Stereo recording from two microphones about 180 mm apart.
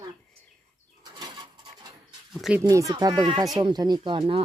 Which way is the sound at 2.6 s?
20° right (ahead or behind).